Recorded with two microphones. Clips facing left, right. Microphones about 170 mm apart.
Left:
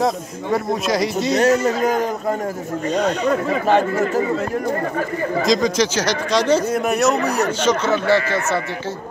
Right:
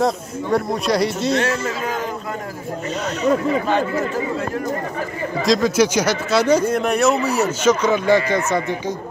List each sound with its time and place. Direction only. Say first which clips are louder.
0.0 s speech: right 1 dB; centre (ahead or behind)
1.3 s a man's voice: left 5 dB; 40° left (ahead or behind)
3.6 s speech: left 3 dB; 50° left (ahead or behind)
5.5 s speech: right 3 dB; 5° right (ahead or behind)
6.6 s speech: right 1 dB; 5° left (ahead or behind)
7.6 s speech: right 3 dB; 10° right (ahead or behind)